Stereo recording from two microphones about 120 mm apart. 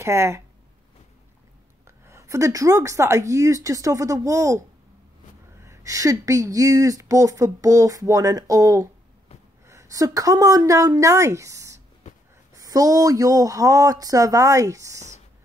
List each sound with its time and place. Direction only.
0.0 s speech: 25° right (ahead or behind)
1.9 s speech: 25° right (ahead or behind)
5.6 s a woman's voice: 25° right (ahead or behind)